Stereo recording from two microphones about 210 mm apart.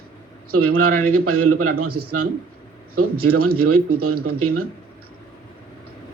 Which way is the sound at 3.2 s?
90° right.